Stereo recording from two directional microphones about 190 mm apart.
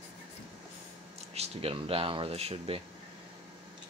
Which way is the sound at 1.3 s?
30° right (ahead or behind).